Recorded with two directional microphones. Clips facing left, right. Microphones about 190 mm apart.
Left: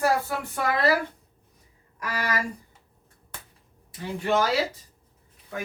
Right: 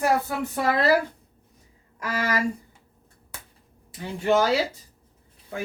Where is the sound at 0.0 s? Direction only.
20° right (ahead or behind).